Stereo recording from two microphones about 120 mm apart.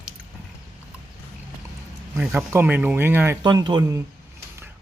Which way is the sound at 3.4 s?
40° right (ahead or behind).